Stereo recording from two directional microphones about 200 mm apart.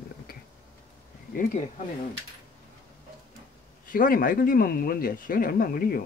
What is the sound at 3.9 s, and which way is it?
Speech, 45° left (ahead or behind).